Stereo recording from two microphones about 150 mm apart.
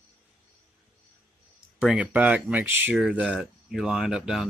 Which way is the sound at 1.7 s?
5° right (ahead or behind).